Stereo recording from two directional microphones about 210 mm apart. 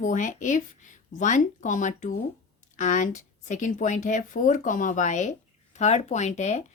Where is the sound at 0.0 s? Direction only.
35° left (ahead or behind).